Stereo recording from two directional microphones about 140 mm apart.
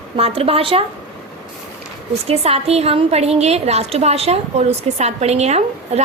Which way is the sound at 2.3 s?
45° right (ahead or behind).